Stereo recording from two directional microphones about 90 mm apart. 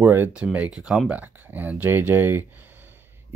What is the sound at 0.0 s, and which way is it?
Speech, 25° right (ahead or behind).